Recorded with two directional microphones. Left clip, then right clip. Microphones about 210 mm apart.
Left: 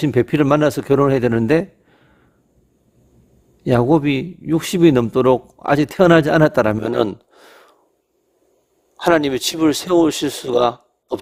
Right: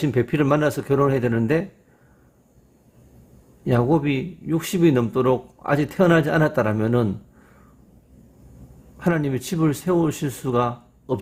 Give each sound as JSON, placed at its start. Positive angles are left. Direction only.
{"t": 0.0, "sound": "speech", "side_deg": 40}
{"t": 3.7, "sound": "a man's voice", "side_deg": 40}
{"t": 9.0, "sound": "speech", "side_deg": 45}